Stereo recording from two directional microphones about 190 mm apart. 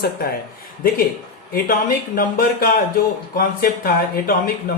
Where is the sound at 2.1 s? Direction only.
50° left (ahead or behind).